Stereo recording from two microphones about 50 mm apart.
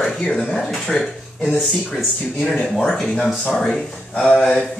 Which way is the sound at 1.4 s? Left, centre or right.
Centre.